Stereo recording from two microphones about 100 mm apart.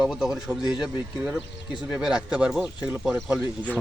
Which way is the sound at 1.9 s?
5° right (ahead or behind).